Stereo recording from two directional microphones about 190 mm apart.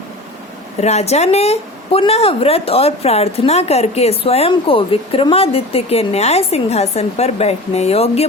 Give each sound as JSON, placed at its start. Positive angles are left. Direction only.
{"t": 0.8, "sound": "a woman's voice", "side_deg": 35}